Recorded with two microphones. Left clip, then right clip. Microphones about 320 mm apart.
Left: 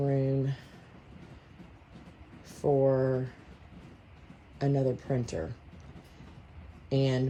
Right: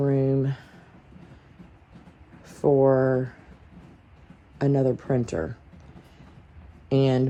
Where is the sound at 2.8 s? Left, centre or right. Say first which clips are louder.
Right 7 dB; right.